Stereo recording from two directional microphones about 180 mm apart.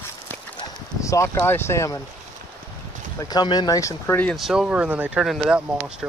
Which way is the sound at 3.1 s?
20° left (ahead or behind).